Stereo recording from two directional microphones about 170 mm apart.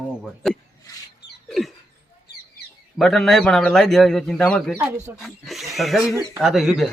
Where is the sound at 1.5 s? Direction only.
Centre (ahead or behind).